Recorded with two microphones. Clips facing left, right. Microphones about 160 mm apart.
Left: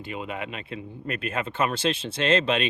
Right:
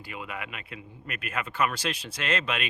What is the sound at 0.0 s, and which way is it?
Speech, 25° left (ahead or behind).